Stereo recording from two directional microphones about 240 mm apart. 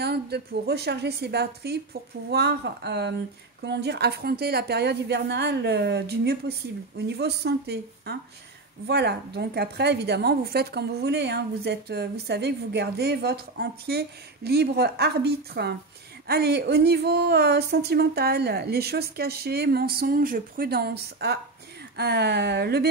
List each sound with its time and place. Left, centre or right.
0.0 s a woman's voice: right